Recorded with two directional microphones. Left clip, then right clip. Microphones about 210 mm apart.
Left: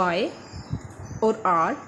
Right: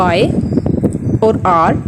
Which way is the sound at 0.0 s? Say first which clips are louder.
Right 11 dB; 45° right (ahead or behind).